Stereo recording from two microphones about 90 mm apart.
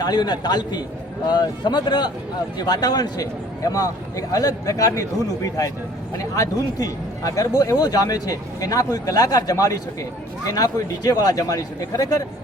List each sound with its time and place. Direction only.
0.0 s a man's voice: 50° left (ahead or behind)